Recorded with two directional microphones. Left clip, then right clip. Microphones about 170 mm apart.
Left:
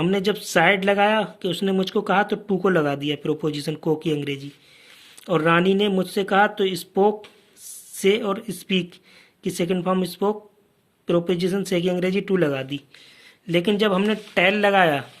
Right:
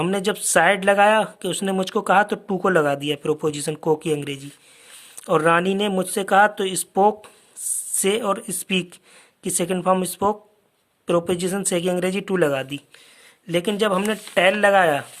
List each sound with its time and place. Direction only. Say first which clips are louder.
0.0 s speech: even; 40° right (ahead or behind)